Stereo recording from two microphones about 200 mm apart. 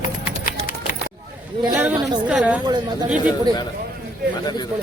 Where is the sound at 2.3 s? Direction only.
5° right (ahead or behind).